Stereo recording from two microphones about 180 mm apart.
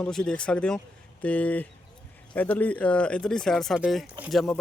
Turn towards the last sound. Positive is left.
turn(degrees=0)  # may be behind; listen again after turning